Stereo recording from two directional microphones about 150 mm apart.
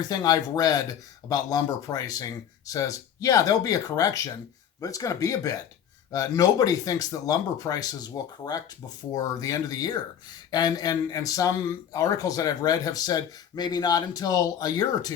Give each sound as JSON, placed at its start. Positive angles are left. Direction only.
{"t": 0.1, "sound": "speech", "side_deg": 25}